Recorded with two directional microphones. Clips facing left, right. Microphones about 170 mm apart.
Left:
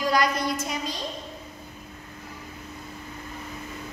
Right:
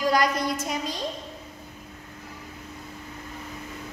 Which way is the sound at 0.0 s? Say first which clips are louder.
Right 1 dB; 45° right (ahead or behind).